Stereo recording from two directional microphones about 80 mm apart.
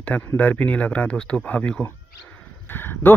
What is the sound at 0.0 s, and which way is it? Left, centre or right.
Speech, centre.